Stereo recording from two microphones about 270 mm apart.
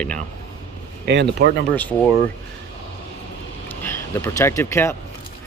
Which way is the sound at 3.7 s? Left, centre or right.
Centre.